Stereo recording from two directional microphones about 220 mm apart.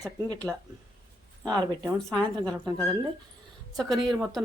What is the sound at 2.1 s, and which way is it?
Speech, 5° left (ahead or behind).